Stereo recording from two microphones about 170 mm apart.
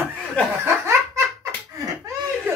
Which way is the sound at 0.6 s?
15° right (ahead or behind).